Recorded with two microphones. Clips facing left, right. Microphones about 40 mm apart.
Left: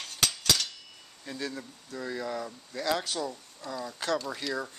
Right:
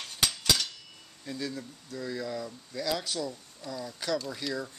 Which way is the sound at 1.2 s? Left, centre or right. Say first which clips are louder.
Even; centre.